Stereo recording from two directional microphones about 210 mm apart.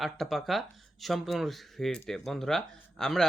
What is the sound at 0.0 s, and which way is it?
Speech, centre (ahead or behind).